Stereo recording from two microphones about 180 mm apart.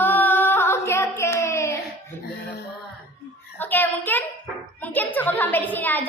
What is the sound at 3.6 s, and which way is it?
A woman's voice, 10° left (ahead or behind).